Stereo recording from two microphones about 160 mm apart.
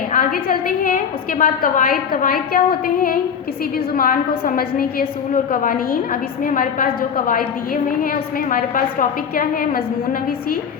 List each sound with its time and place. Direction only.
0.1 s a woman's voice: 60° left (ahead or behind)